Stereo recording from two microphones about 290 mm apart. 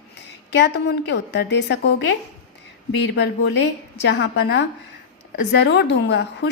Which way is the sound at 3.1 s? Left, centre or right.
Left.